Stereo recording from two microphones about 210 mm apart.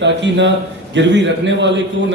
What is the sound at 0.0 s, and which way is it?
A man's voice, 55° right (ahead or behind).